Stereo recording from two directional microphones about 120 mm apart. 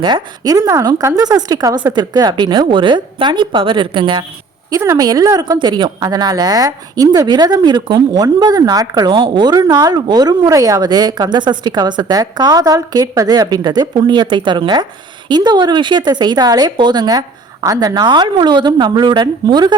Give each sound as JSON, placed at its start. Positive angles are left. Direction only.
{"t": 0.0, "sound": "a woman's voice", "side_deg": -35}
{"t": 4.7, "sound": "a woman's voice", "side_deg": -25}